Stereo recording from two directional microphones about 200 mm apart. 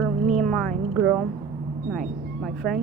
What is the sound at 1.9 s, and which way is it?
Speech, centre (ahead or behind).